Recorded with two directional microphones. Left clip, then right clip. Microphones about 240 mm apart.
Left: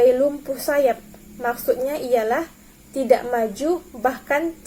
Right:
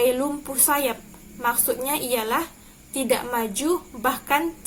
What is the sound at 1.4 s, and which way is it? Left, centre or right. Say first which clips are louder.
A woman's voice: left 3 dB; right.